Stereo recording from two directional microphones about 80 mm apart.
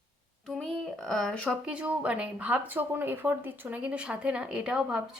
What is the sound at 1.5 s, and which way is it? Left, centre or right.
Speech, centre.